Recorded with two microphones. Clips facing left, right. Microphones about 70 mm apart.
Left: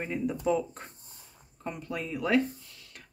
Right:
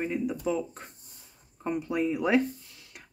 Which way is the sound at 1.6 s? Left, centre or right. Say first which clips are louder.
Right 7 dB; centre.